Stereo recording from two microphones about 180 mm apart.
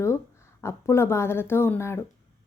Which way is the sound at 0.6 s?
15° left (ahead or behind).